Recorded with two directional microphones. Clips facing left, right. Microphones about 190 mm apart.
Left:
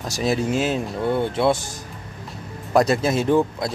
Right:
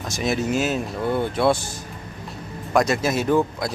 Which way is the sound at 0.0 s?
35° left (ahead or behind).